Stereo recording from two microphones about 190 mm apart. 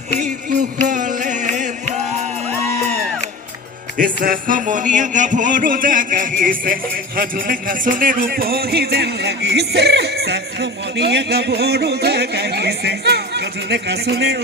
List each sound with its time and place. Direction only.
0.9 s music: 45° right (ahead or behind)
3.9 s music: 50° right (ahead or behind)